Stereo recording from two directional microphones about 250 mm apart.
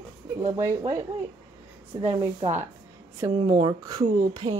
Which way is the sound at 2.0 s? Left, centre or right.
Centre.